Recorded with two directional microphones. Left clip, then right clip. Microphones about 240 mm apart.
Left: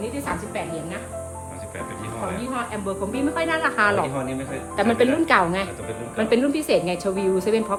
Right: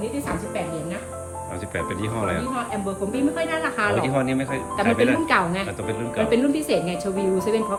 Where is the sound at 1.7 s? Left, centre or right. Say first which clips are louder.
Right 5 dB; centre.